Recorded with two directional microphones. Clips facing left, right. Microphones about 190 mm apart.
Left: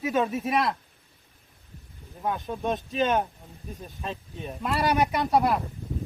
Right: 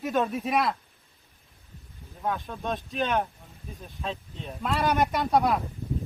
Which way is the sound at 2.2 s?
15° left (ahead or behind).